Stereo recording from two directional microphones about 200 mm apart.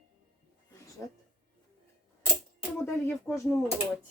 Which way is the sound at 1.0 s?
10° left (ahead or behind).